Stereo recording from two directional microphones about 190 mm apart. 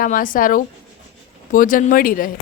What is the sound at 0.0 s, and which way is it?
Speech, 45° left (ahead or behind).